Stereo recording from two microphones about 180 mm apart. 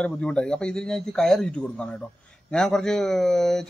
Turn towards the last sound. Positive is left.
turn(degrees=0)  # may be behind; listen again after turning